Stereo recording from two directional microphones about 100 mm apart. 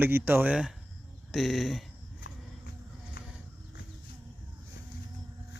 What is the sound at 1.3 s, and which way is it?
Speech, centre (ahead or behind).